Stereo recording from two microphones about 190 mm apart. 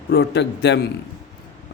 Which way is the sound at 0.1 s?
60° left (ahead or behind).